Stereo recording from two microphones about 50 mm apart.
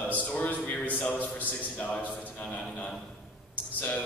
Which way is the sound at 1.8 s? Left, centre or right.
Left.